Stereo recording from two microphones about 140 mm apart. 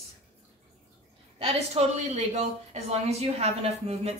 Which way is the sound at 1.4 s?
45° right (ahead or behind).